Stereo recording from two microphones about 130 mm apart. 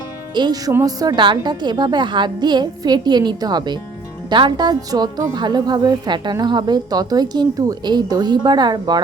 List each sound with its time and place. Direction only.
0.3 s a woman's voice: 30° right (ahead or behind)